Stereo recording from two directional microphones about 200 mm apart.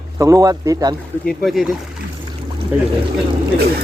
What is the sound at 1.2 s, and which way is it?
Speech, centre (ahead or behind).